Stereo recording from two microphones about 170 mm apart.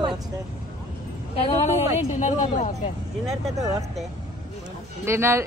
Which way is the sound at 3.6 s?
20° right (ahead or behind).